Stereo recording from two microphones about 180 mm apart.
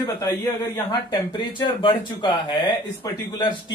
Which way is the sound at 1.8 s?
25° left (ahead or behind).